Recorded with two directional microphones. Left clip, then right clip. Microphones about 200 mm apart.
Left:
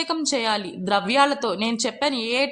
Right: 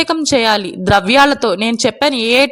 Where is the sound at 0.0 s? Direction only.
40° right (ahead or behind).